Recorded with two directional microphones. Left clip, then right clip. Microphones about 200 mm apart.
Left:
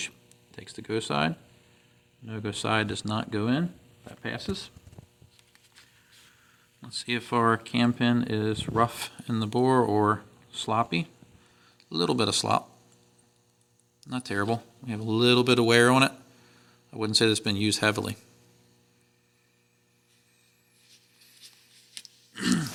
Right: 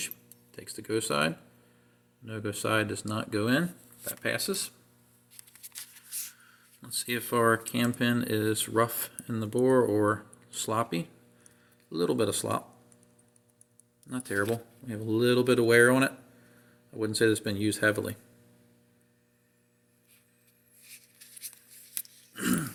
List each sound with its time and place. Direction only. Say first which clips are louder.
0.5 s speech: even; 45° left (ahead or behind)
6.8 s speech: left 2 dB; 45° left (ahead or behind)
14.0 s speech: left 1 dB; 50° left (ahead or behind)
21.9 s a sound: left 2 dB; 45° left (ahead or behind)